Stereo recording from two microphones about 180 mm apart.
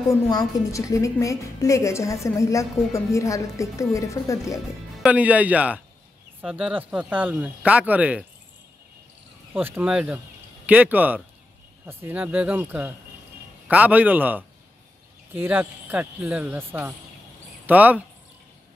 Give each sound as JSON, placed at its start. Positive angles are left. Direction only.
{"t": 0.1, "sound": "a woman's voice", "side_deg": 20}
{"t": 5.0, "sound": "speech", "side_deg": -10}
{"t": 9.5, "sound": "speech", "side_deg": -10}